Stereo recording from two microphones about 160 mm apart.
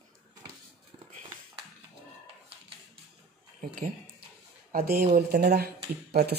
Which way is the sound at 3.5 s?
55° right (ahead or behind).